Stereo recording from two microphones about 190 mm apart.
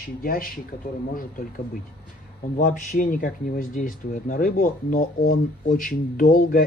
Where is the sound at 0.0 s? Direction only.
50° left (ahead or behind).